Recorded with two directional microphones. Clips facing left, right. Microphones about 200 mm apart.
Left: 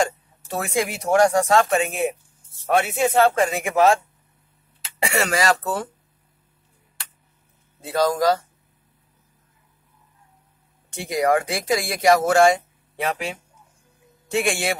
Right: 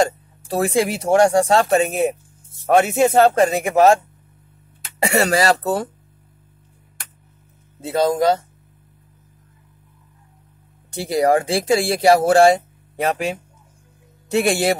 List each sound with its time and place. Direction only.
0.0 s speech: 35° right (ahead or behind)
7.8 s speech: 25° right (ahead or behind)
10.9 s speech: 35° right (ahead or behind)